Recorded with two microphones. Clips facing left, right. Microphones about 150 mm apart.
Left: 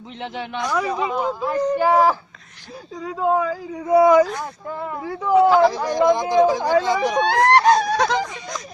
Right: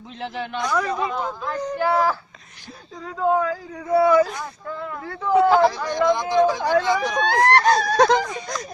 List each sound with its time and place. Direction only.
0.2 s speech: 5° left (ahead or behind)
5.7 s speech: 40° left (ahead or behind)
6.3 s speech: 5° left (ahead or behind)
7.2 s speech: 20° left (ahead or behind)
8.0 s speech: 45° right (ahead or behind)